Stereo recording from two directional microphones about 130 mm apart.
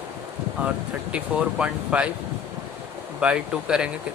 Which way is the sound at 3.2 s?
5° right (ahead or behind).